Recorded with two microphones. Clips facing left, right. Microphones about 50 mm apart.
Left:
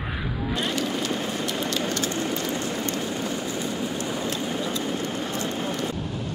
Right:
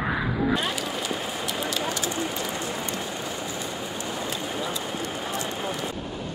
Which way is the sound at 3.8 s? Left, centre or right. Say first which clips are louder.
Left 3 dB; centre.